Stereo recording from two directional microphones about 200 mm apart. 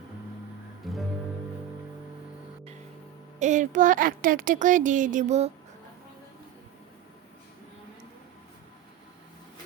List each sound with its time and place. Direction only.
0.8 s music: centre (ahead or behind)
3.4 s speech: 40° right (ahead or behind)